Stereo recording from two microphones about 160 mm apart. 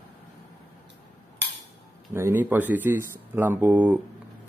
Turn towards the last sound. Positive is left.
turn(degrees=-10)  # may be behind; listen again after turning